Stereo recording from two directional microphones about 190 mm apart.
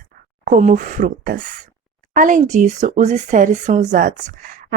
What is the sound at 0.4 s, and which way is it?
Speech, 40° right (ahead or behind).